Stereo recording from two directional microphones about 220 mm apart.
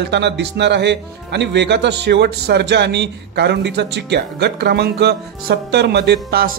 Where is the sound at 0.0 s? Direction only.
50° right (ahead or behind).